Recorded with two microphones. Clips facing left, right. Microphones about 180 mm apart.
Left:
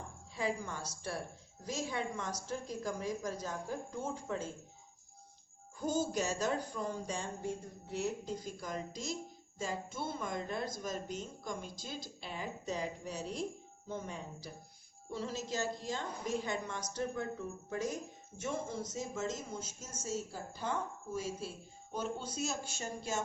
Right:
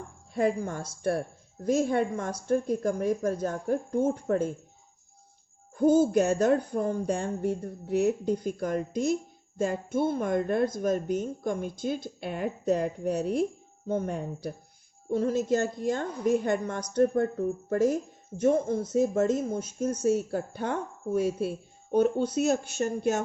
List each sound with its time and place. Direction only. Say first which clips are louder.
0.3 s speech: right 10 dB; 55° right (ahead or behind)
5.7 s speech: right 13 dB; 55° right (ahead or behind)